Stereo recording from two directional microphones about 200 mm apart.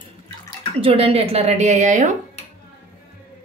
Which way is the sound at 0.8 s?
30° right (ahead or behind).